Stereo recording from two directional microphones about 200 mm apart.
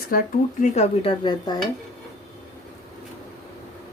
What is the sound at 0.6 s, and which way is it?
Dishes, 35° left (ahead or behind).